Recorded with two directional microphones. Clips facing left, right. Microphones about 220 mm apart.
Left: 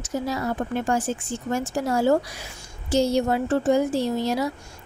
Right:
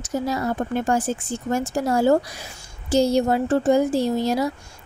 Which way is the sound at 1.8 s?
45° right (ahead or behind).